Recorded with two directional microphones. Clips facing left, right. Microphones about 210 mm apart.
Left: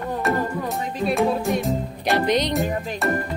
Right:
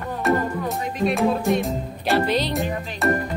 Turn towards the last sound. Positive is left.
turn(degrees=0)  # may be behind; listen again after turning